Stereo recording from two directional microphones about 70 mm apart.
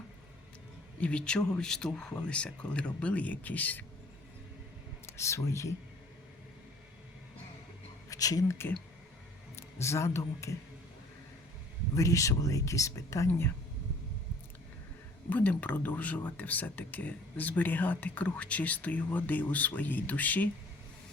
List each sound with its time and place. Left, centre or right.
1.0 s speech: centre
5.1 s speech: left
8.1 s speech: left
8.4 s a man's voice: left
11.9 s speech: left
15.3 s speech: left